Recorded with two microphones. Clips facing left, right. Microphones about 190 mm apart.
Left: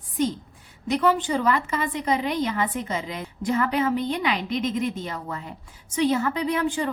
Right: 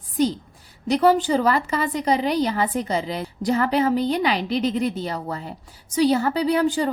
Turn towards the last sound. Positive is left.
turn(degrees=-35)  # may be behind; listen again after turning